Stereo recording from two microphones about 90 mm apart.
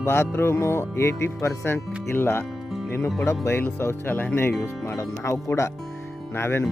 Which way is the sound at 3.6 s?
20° left (ahead or behind).